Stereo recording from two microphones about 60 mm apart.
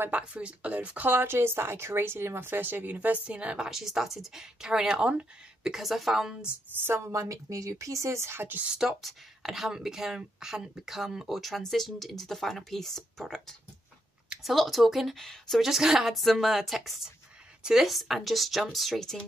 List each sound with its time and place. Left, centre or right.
0.1 s speech: centre
3.7 s speech: centre
7.1 s speech: right
8.6 s speech: centre
15.1 s speech: centre
15.6 s speech: centre